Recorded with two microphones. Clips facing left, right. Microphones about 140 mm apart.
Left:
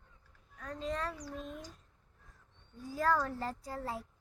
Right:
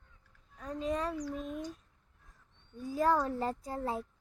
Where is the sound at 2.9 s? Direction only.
20° right (ahead or behind).